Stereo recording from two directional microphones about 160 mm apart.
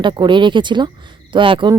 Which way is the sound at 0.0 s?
30° right (ahead or behind).